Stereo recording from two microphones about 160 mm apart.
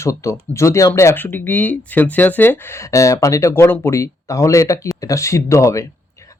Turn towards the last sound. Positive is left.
turn(degrees=20)  # may be behind; listen again after turning